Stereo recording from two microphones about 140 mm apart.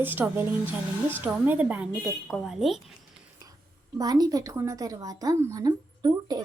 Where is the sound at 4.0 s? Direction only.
30° right (ahead or behind).